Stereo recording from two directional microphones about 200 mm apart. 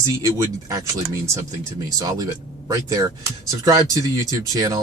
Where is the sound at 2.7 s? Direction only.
15° right (ahead or behind).